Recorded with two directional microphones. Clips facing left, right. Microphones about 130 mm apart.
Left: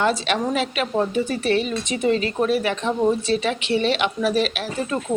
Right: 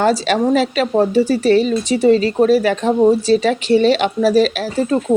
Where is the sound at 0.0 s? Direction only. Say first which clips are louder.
Right 6 dB; 40° right (ahead or behind).